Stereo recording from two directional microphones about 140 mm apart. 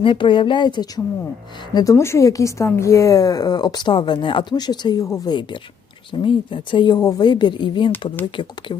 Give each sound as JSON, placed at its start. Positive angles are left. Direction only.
{"t": 0.0, "sound": "a woman's voice", "side_deg": 35}